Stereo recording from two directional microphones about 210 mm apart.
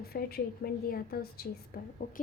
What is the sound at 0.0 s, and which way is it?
A woman's voice, 45° left (ahead or behind).